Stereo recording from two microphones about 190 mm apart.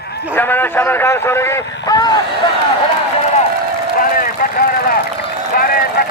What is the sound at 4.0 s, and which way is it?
Vehicle, 45° left (ahead or behind).